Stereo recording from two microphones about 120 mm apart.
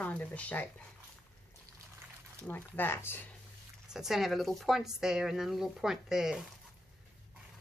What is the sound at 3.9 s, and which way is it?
Speech, 5° right (ahead or behind).